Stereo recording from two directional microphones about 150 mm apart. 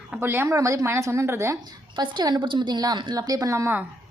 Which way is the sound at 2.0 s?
30° right (ahead or behind).